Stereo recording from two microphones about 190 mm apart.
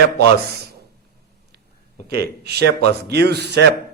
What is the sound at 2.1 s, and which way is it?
Speech, 55° right (ahead or behind).